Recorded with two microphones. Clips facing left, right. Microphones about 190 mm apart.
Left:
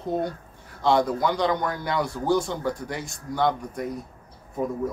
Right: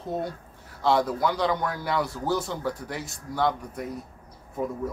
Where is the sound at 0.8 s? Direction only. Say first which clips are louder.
Left 2 dB; 5° right (ahead or behind).